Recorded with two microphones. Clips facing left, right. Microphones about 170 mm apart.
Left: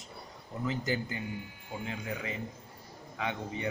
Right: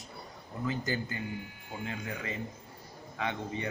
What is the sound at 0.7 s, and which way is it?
Speech, 15° left (ahead or behind).